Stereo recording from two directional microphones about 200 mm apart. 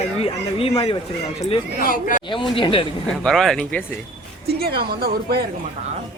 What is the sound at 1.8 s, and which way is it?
Speech, 45° left (ahead or behind).